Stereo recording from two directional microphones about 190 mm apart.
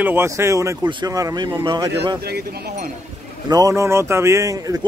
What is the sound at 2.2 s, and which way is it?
Speech, 55° right (ahead or behind).